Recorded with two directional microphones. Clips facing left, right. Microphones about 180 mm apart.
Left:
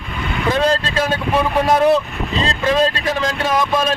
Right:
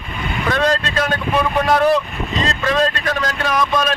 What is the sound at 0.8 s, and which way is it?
Speech, 25° left (ahead or behind).